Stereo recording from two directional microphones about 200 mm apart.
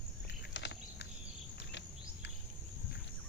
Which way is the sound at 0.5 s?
60° left (ahead or behind).